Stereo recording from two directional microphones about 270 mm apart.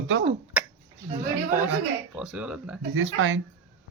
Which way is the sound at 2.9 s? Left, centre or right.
Right.